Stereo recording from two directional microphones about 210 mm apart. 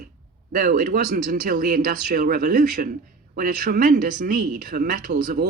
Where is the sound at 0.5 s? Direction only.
40° right (ahead or behind).